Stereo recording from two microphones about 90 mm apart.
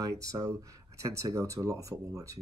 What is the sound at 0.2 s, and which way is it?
Speech, 40° right (ahead or behind).